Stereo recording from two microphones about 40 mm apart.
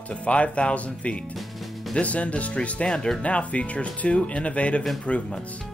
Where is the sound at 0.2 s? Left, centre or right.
Left.